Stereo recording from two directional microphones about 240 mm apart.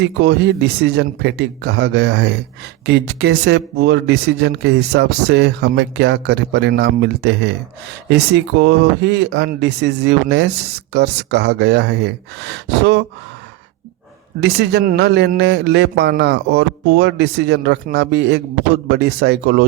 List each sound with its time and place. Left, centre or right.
0.0 s a man's voice: right
14.4 s a man's voice: right